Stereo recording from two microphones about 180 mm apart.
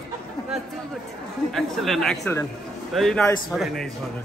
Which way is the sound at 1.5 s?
Centre (ahead or behind).